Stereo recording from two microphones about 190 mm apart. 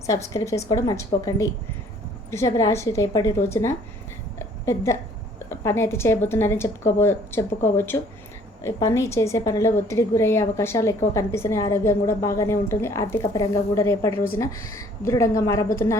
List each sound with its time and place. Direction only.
0.1 s a woman's voice: 15° left (ahead or behind)
4.4 s a sound: 15° left (ahead or behind)
5.5 s a woman's voice: 15° left (ahead or behind)